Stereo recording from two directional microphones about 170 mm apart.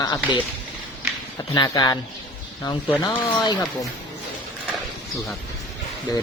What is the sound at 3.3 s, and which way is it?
Speech, 25° left (ahead or behind).